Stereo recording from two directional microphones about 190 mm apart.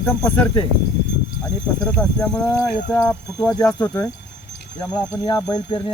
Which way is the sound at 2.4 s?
15° left (ahead or behind).